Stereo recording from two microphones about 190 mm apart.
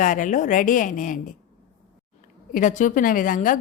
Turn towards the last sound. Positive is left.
turn(degrees=45)  # may be behind; listen again after turning